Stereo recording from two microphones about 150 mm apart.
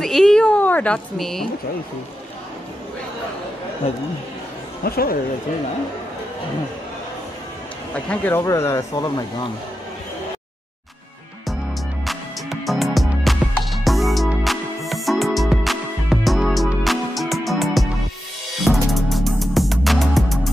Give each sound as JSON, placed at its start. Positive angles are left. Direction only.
{"t": 0.0, "sound": "a sound", "side_deg": 5}
{"t": 4.8, "sound": "speech", "side_deg": 90}
{"t": 7.9, "sound": "speech", "side_deg": 10}
{"t": 12.1, "sound": "music", "side_deg": 0}